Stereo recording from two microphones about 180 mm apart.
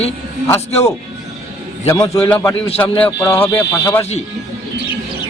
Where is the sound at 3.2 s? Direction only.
15° left (ahead or behind).